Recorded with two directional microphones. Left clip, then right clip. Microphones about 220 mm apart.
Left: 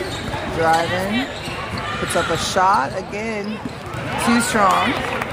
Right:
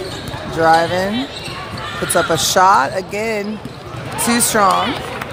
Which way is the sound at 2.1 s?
35° right (ahead or behind).